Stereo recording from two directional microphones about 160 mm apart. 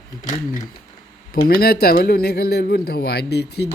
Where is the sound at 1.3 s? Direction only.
70° left (ahead or behind).